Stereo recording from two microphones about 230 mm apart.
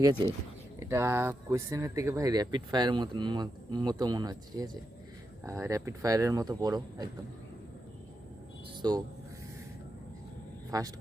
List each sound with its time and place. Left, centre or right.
0.8 s speech: centre
8.8 s speech: centre
10.7 s speech: centre